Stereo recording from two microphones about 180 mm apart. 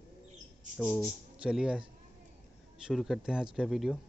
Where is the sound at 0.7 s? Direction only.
Centre (ahead or behind).